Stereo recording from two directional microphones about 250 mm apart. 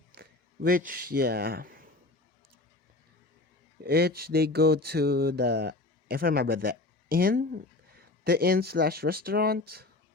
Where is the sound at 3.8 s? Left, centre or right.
Right.